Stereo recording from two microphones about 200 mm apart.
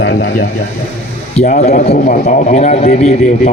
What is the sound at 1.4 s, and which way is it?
A man's voice, 35° left (ahead or behind).